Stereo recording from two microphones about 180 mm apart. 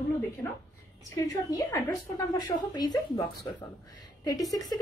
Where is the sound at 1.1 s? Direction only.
15° left (ahead or behind).